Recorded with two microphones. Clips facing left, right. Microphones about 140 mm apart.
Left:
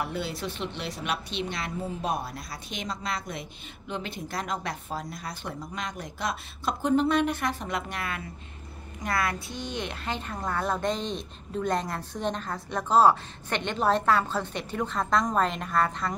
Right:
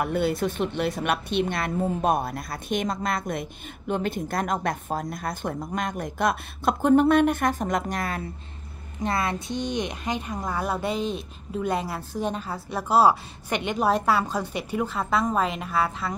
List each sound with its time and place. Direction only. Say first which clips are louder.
0.0 s speech: right 8 dB; 55° right (ahead or behind)
9.0 s a woman's voice: right 3 dB; 25° right (ahead or behind); by 16.2 s 5° right (ahead or behind)